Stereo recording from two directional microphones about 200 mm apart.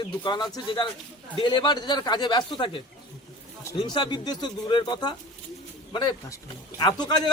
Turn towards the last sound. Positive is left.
turn(degrees=20)  # may be behind; listen again after turning